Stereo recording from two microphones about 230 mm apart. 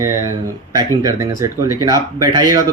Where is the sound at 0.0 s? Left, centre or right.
Centre.